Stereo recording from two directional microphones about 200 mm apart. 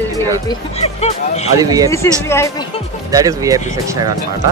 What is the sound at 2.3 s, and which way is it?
Speech, 15° left (ahead or behind).